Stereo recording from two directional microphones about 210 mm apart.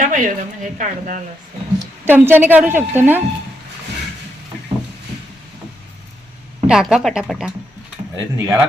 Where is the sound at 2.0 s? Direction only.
10° right (ahead or behind).